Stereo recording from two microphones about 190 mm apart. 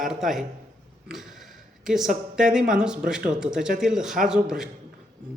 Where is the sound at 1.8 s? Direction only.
Centre (ahead or behind).